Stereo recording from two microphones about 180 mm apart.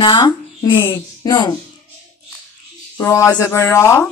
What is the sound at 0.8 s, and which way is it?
Speech, 15° left (ahead or behind).